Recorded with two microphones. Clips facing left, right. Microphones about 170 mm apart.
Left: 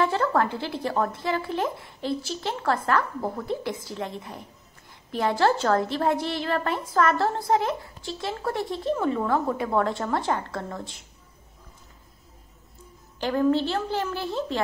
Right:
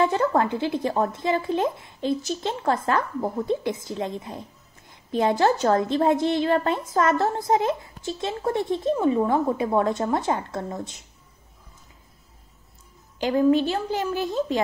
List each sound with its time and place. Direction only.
0.0 s a woman's voice: 20° right (ahead or behind)
13.2 s a woman's voice: 15° right (ahead or behind)